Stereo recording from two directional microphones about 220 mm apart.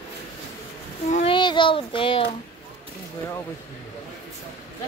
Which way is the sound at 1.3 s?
20° left (ahead or behind).